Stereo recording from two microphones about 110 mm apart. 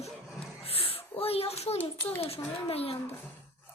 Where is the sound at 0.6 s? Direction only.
60° left (ahead or behind).